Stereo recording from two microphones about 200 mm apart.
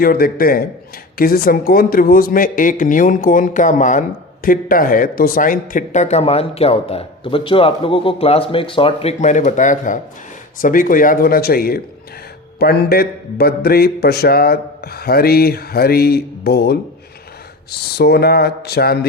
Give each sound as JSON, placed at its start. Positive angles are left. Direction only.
{"t": 0.0, "sound": "speech", "side_deg": 50}